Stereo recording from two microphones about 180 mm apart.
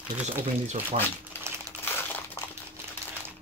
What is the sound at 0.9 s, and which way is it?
Speech, 35° right (ahead or behind).